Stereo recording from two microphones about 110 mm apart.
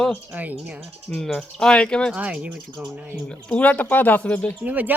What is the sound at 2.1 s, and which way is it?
Speech, 10° right (ahead or behind).